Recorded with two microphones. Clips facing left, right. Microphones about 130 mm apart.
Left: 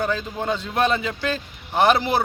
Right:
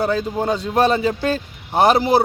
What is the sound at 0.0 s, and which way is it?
A man's voice, 35° right (ahead or behind).